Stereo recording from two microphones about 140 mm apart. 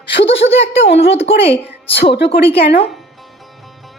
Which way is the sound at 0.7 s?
45° left (ahead or behind).